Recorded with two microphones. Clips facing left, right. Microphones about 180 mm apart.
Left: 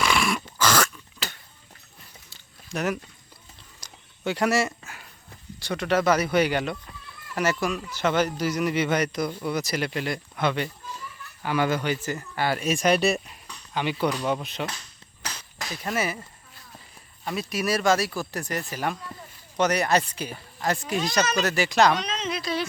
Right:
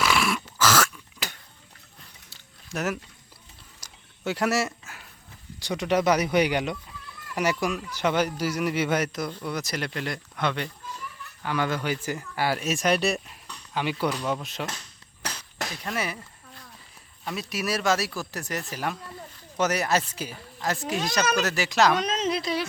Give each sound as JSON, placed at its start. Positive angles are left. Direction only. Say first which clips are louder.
{"t": 0.0, "sound": "dog", "louder": "even", "side_deg": -5}
{"t": 1.2, "sound": "a sound", "louder": "left 1 dB", "side_deg": -15}
{"t": 2.3, "sound": "a sound", "louder": "left 1 dB", "side_deg": 0}
{"t": 5.5, "sound": "speech", "louder": "even", "side_deg": -15}
{"t": 15.8, "sound": "speech", "louder": "left 4 dB", "side_deg": 5}
{"t": 17.2, "sound": "speech", "louder": "left 3 dB", "side_deg": 0}
{"t": 21.9, "sound": "a woman's voice", "louder": "right 4 dB", "side_deg": -45}